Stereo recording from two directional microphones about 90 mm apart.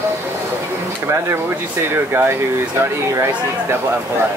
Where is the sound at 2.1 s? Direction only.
25° right (ahead or behind).